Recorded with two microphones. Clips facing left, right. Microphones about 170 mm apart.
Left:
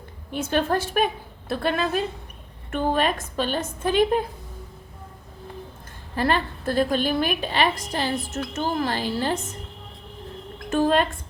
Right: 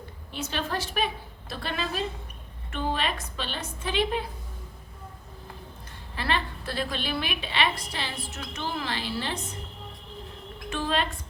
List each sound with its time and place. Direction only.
0.3 s a woman's voice: 50° left (ahead or behind)
6.1 s a woman's voice: 45° left (ahead or behind)
10.7 s a woman's voice: 45° left (ahead or behind)